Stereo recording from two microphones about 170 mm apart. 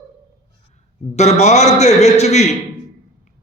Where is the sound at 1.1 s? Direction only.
40° left (ahead or behind).